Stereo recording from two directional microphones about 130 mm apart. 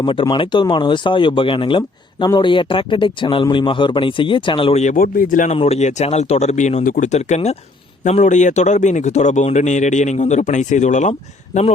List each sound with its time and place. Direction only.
0.0 s speech: 40° left (ahead or behind)
4.7 s speech: 65° left (ahead or behind); by 5.5 s 90° left
5.5 s speech: 55° left (ahead or behind)